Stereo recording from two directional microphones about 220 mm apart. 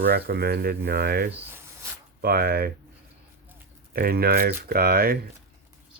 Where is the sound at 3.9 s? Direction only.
40° right (ahead or behind).